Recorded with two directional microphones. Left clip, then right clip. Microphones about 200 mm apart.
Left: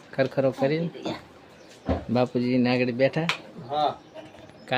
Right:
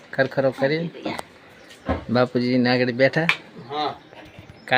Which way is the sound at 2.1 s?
5° right (ahead or behind).